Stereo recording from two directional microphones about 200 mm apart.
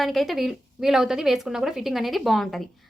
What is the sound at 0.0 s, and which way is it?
A woman's voice, centre (ahead or behind).